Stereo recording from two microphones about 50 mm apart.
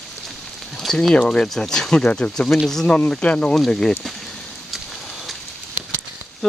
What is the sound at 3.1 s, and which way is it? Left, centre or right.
Speech, left.